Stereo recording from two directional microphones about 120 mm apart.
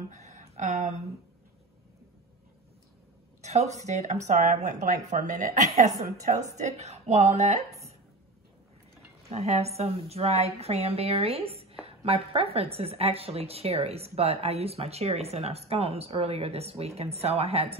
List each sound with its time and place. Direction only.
0.1 s a sound: 75° right (ahead or behind)
3.4 s speech: 70° right (ahead or behind); by 5.9 s 90° right
6.5 s a woman's voice: 65° right (ahead or behind)
9.3 s a woman's voice: 65° right (ahead or behind)